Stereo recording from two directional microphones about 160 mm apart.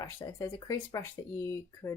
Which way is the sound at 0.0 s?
20° left (ahead or behind).